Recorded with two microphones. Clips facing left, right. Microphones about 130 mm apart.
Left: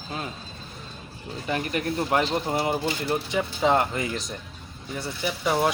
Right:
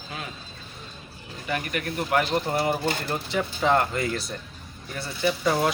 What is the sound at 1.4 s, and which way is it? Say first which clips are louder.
Speech: left 2 dB; 30° left (ahead or behind).